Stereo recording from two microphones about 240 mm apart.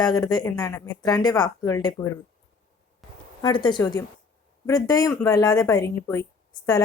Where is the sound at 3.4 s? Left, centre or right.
Centre.